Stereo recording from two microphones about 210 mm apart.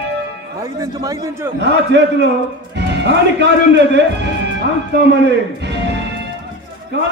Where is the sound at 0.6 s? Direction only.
15° right (ahead or behind).